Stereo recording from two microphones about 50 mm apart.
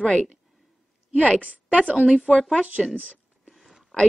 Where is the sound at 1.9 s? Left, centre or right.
Right.